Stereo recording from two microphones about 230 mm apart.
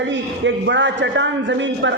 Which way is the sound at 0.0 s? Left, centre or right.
Right.